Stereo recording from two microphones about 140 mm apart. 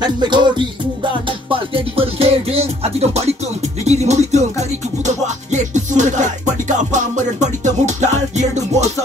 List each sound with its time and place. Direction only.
0.0 s music: 30° right (ahead or behind); by 8.9 s 55° right (ahead or behind)